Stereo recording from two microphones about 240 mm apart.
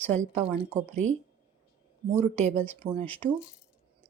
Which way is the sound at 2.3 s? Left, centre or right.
Right.